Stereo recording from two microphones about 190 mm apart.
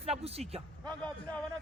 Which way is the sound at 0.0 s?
30° right (ahead or behind).